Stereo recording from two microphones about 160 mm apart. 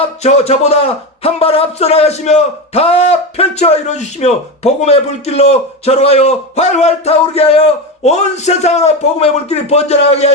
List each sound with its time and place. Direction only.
0.2 s a man's voice: 40° left (ahead or behind)